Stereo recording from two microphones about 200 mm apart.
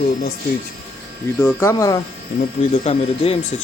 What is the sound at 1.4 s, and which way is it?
Speech, 15° left (ahead or behind).